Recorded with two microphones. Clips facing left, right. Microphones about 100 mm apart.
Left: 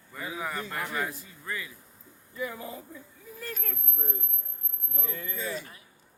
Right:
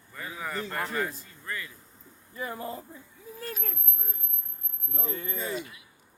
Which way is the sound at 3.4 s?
30° right (ahead or behind).